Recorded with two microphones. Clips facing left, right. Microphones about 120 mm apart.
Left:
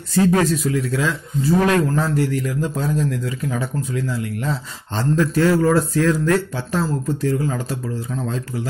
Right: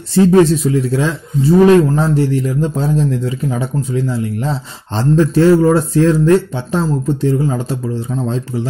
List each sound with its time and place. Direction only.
0.1 s a man's voice: 25° right (ahead or behind)